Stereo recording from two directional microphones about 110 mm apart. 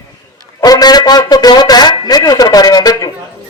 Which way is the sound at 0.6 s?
35° left (ahead or behind).